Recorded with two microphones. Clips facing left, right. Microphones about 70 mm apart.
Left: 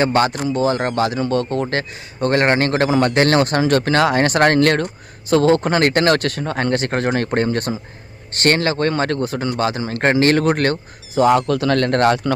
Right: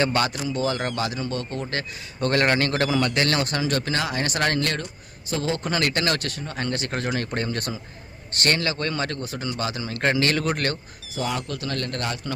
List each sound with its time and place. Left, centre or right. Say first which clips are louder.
0.0 s speech: left 6 dB; left
2.2 s a man's voice: left 5 dB; left
11.2 s speech: left 14 dB; left